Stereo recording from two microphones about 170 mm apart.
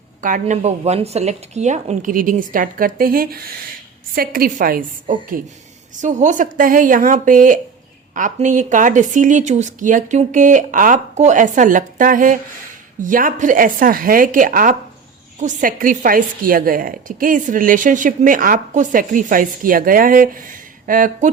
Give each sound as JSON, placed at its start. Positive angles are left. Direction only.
{"t": 0.2, "sound": "a woman's voice", "side_deg": -50}